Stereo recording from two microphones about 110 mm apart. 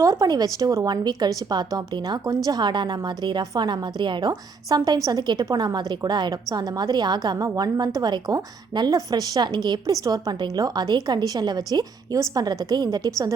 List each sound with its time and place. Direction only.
0.0 s a woman's voice: 35° right (ahead or behind)